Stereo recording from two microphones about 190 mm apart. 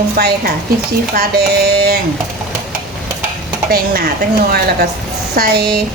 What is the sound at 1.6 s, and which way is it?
Speech, 55° right (ahead or behind).